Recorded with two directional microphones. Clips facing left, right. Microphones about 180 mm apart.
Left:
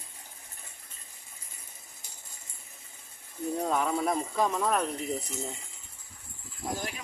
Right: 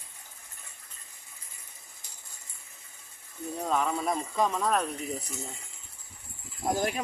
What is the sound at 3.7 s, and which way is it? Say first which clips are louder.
Speech: right 2 dB; 5° left (ahead or behind).